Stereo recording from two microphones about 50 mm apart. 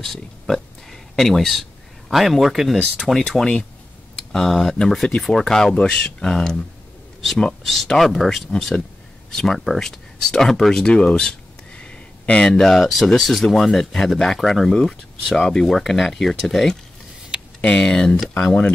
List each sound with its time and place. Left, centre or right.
0.0 s speech: centre
3.2 s speech: centre
7.6 s speech: centre
10.7 s a sound: centre
12.8 s speech: centre
17.6 s speech: left